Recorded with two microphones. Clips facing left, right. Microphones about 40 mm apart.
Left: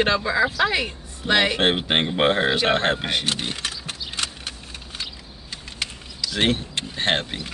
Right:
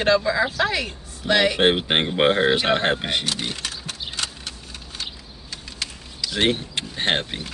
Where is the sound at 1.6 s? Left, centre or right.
Centre.